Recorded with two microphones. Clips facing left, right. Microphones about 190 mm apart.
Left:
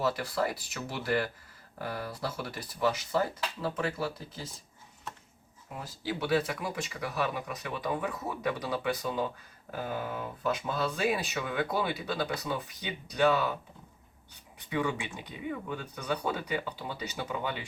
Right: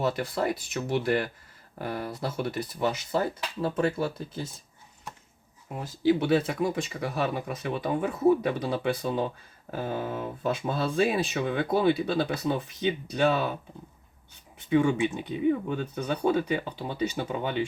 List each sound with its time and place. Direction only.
0.2 s speech: 25° right (ahead or behind)
5.7 s speech: 20° right (ahead or behind)
14.7 s speech: 25° right (ahead or behind)